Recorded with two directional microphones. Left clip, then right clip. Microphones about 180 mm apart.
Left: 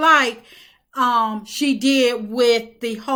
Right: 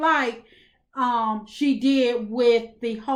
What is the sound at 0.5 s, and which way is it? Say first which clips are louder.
A woman's voice: left 6 dB; 15° left (ahead or behind).